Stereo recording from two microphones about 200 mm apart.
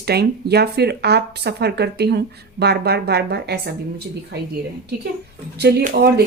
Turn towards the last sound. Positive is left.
turn(degrees=-50)  # may be behind; listen again after turning